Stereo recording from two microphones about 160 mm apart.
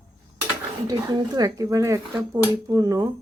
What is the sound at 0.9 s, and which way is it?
Speech, 25° right (ahead or behind).